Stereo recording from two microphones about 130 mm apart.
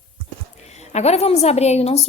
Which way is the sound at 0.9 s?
55° left (ahead or behind).